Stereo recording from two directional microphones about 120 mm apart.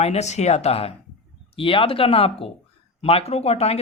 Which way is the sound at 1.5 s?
50° left (ahead or behind).